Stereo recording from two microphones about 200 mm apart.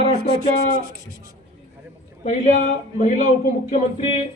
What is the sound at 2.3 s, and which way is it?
Speech, 35° left (ahead or behind).